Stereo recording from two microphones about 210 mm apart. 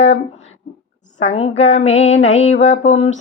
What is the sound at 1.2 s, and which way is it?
Female singing, 30° left (ahead or behind).